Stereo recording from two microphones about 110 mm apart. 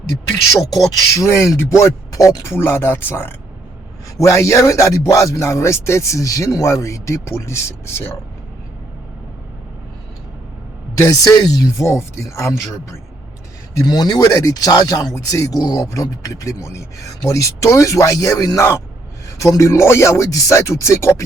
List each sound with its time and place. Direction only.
1.1 s speech: 25° left (ahead or behind)
11.0 s speech: 35° left (ahead or behind)